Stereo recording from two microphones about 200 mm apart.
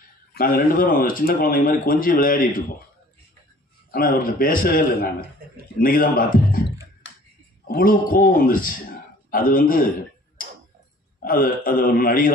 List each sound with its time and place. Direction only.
0.3 s speech: 50° left (ahead or behind)
3.9 s speech: 45° left (ahead or behind)
7.0 s a sound: 65° left (ahead or behind)
7.6 s a man's voice: 45° left (ahead or behind)
11.2 s speech: 45° left (ahead or behind)